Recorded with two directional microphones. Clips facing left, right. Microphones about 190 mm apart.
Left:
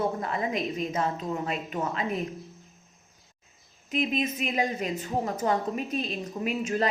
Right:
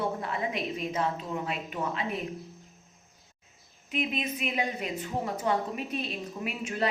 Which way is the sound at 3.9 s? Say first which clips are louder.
Left 4 dB; 40° left (ahead or behind).